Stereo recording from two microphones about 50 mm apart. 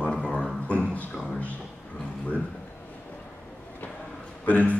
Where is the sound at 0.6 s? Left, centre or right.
Left.